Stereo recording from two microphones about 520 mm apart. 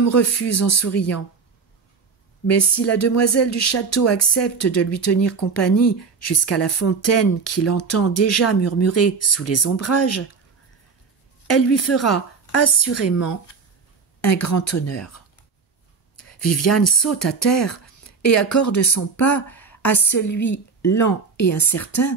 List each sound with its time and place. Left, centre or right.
0.0 s speech: left
2.8 s speech: left
11.4 s speech: left
16.3 s speech: left